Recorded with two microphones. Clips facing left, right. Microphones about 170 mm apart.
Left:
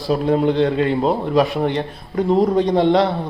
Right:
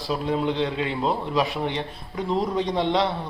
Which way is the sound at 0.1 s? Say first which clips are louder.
Left 8 dB; 50° left (ahead or behind).